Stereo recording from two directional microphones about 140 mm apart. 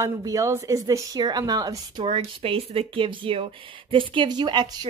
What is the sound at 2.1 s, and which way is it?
A woman's voice, 40° right (ahead or behind).